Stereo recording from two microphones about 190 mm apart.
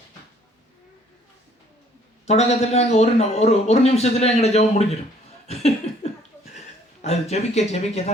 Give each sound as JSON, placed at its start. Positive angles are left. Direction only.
{"t": 2.2, "sound": "a man's voice", "side_deg": 35}
{"t": 5.5, "sound": "laughter", "side_deg": 35}
{"t": 7.0, "sound": "a man's voice", "side_deg": 35}